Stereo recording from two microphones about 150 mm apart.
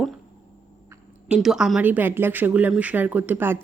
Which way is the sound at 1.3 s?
5° right (ahead or behind).